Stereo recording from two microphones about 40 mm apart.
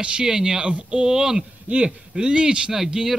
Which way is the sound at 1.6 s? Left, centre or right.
Right.